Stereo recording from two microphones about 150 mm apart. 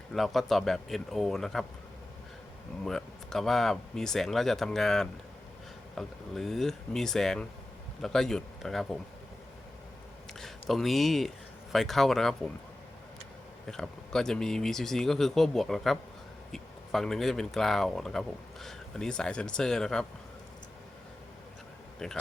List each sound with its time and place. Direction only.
0.1 s speech: centre (ahead or behind)
2.8 s speech: 5° left (ahead or behind)
10.3 s speech: centre (ahead or behind)
13.7 s speech: 5° left (ahead or behind)
22.0 s speech: 5° left (ahead or behind)